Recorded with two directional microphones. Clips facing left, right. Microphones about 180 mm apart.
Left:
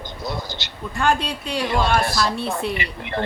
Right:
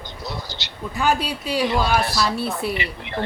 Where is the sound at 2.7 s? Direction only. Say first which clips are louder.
Even; 50° left (ahead or behind).